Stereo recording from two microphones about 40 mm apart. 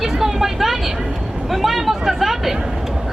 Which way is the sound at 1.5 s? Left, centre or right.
Centre.